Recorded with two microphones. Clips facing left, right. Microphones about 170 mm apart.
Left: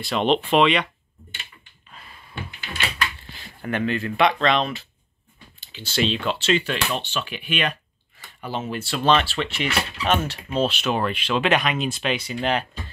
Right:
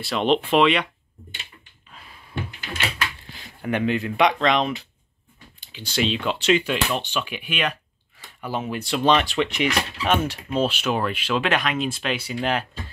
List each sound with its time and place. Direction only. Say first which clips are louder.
0.0 s speech: even; 5° right (ahead or behind)
3.3 s a sound: right 3 dB; centre (ahead or behind)
3.7 s speech: right 1 dB; 15° right (ahead or behind)
11.4 s speech: left 4 dB; 5° left (ahead or behind)